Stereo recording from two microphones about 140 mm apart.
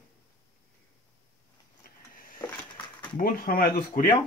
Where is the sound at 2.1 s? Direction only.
90° left.